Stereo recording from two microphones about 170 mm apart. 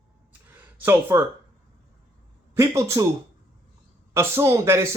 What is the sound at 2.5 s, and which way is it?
Speech, 15° right (ahead or behind).